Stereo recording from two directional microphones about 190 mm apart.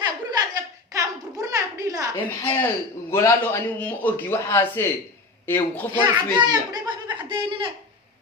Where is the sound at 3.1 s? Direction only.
10° left (ahead or behind).